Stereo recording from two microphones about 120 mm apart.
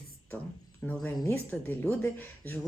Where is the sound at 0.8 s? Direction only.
15° left (ahead or behind).